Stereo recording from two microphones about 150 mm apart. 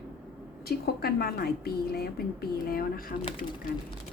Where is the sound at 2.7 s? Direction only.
75° left (ahead or behind).